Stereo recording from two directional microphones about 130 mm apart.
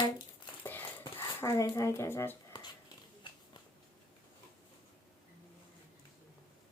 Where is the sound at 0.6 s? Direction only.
15° left (ahead or behind).